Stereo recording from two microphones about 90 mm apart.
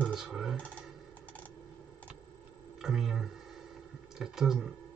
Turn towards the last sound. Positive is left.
turn(degrees=-5)  # may be behind; listen again after turning